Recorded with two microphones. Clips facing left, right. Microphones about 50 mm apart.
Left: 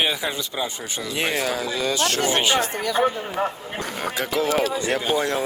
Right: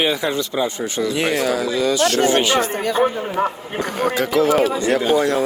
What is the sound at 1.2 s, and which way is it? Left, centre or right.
Speech, right.